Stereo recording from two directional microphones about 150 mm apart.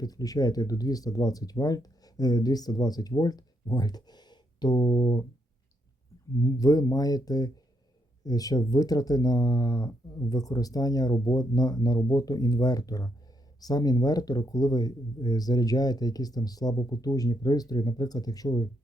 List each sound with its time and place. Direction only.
0.0 s speech: 25° left (ahead or behind)
6.4 s speech: 25° left (ahead or behind)